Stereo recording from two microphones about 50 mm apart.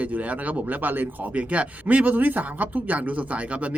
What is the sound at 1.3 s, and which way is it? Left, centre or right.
Speech, right.